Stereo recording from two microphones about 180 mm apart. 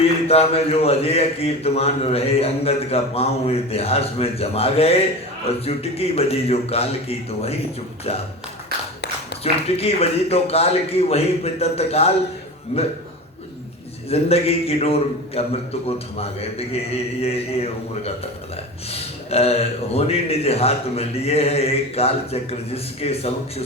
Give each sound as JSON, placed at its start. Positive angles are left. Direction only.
{"t": 0.3, "sound": "a man's voice", "side_deg": 35}
{"t": 9.4, "sound": "a man's voice", "side_deg": 35}
{"t": 14.1, "sound": "a man's voice", "side_deg": 35}
{"t": 16.6, "sound": "a man's voice", "side_deg": 35}